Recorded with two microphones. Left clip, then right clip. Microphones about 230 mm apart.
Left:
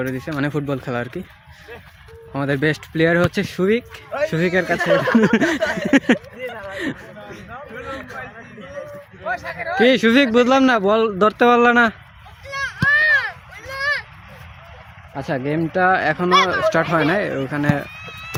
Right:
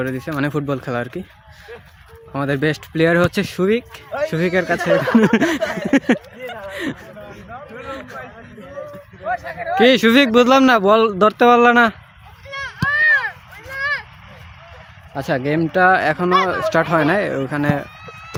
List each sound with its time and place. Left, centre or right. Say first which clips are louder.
0.0 s speech: right 1 dB; centre
2.3 s speech: even; centre
4.8 s speech: even; left
5.1 s speech: right 1 dB; centre
5.9 s speech: left 1 dB; centre
6.5 s a sound: right 2 dB; centre
7.3 s chatter: left 1 dB; left
7.9 s a sound: right 1 dB; centre
8.9 s a sound: right 2 dB; left
9.7 s speech: right 2 dB; centre
12.5 s a sound: left 3 dB; left
15.1 s speech: right 3 dB; centre